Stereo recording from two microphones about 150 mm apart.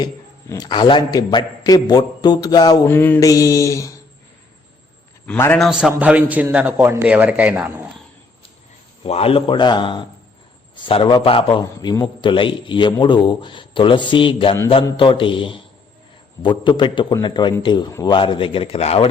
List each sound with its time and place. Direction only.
0.0 s a man's voice: 25° left (ahead or behind)
2.9 s a man's voice: 15° left (ahead or behind)
5.2 s a man's voice: 10° left (ahead or behind)
5.5 s a man's voice: centre (ahead or behind)
9.0 s a man's voice: 40° left (ahead or behind)
11.6 s a man's voice: 25° left (ahead or behind); by 19.0 s 40° left (ahead or behind)